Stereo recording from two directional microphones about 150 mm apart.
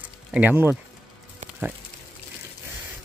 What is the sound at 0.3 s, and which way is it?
Speech, 10° right (ahead or behind).